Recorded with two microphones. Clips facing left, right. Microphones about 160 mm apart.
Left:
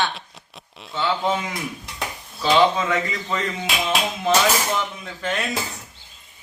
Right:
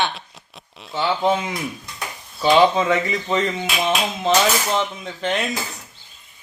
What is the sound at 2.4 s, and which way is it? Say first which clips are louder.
Speech: right 3 dB; 20° right (ahead or behind).